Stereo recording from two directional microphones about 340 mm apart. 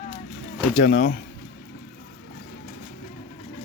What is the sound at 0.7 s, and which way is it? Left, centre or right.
Speech, left.